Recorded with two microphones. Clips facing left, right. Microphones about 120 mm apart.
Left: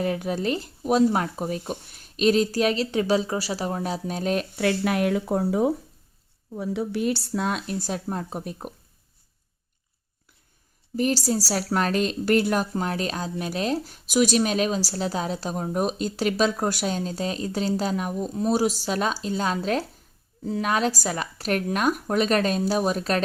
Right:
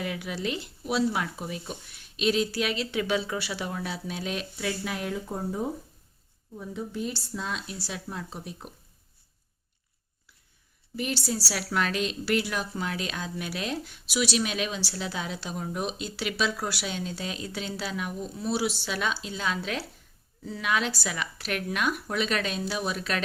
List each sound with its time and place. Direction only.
0.0 s speech: 40° left (ahead or behind)
10.9 s a woman's voice: 40° left (ahead or behind)